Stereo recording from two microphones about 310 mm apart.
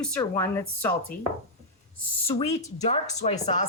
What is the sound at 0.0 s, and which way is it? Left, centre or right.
Speech, centre.